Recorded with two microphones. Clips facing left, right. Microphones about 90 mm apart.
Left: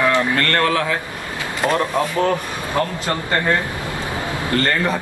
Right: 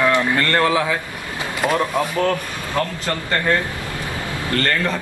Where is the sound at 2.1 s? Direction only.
20° left (ahead or behind).